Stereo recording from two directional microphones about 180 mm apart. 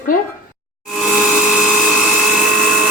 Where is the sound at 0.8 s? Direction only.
Centre (ahead or behind).